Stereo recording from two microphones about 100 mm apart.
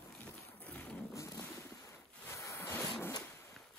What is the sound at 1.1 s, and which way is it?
Ocean, 30° left (ahead or behind).